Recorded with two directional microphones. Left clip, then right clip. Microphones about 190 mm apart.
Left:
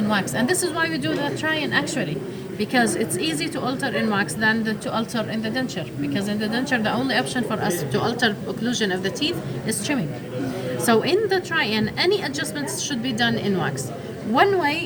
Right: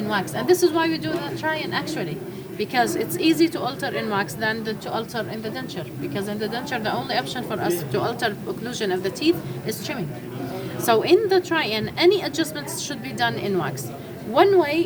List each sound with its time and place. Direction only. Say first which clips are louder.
0.1 s a woman's voice: right 3 dB; 20° right (ahead or behind)
2.6 s a woman's voice: even; 30° right (ahead or behind)
6.1 s a woman's voice: left 1 dB; 20° right (ahead or behind)
10.8 s a woman's voice: right 2 dB; 30° right (ahead or behind)